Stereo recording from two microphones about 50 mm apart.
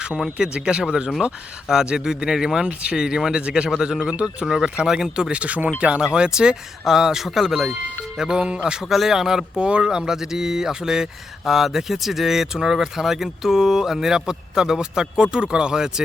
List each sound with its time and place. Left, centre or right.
0.3 s speech: centre
4.1 s speech: right
4.4 s speech: centre
5.3 s speech: right